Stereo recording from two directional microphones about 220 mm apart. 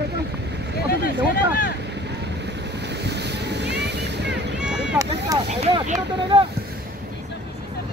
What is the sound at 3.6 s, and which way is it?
Vehicle, 50° right (ahead or behind).